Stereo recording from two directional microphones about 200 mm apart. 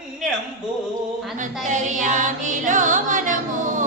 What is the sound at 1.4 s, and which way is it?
Music, 40° right (ahead or behind).